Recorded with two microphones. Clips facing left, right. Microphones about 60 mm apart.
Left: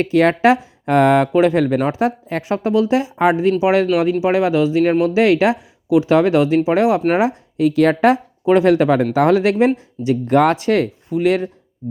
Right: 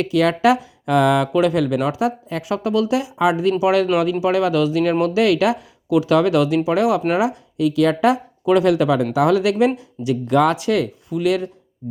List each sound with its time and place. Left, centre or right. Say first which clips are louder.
0.0 s speech: left 3 dB; left